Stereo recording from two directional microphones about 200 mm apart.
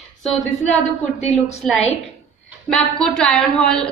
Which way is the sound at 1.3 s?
Centre (ahead or behind).